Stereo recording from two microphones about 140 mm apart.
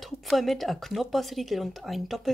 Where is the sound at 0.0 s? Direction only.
Centre (ahead or behind).